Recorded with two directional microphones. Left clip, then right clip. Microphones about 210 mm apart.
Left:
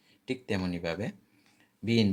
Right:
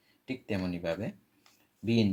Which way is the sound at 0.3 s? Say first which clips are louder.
Left 2 dB; 20° left (ahead or behind).